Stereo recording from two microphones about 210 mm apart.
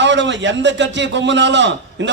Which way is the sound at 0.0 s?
60° right (ahead or behind).